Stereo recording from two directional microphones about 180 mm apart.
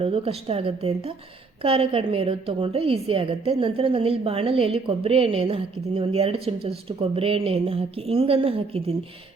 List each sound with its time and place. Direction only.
0.0 s a woman's voice: 30° right (ahead or behind)